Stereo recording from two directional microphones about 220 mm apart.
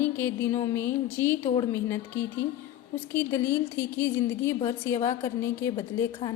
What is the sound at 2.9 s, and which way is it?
A woman's voice, 10° left (ahead or behind).